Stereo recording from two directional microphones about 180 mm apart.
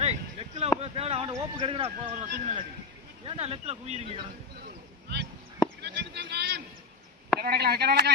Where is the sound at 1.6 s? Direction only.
30° right (ahead or behind).